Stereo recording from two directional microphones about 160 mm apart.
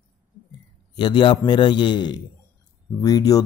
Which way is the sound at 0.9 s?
30° left (ahead or behind).